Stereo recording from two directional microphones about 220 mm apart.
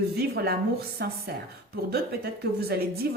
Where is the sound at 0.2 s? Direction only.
45° right (ahead or behind).